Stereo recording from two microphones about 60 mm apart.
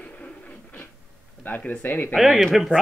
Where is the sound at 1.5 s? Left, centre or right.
Left.